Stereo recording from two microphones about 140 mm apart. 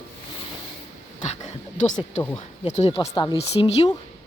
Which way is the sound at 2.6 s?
55° left (ahead or behind).